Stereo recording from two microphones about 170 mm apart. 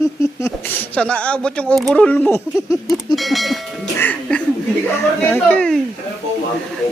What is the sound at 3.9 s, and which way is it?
Music, 10° left (ahead or behind).